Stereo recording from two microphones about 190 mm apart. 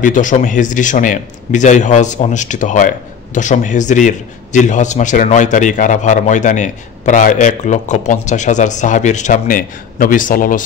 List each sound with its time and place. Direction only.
0.0 s speech: 40° left (ahead or behind)